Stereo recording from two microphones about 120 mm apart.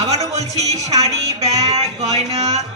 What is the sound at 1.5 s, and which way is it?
Speech, 30° right (ahead or behind).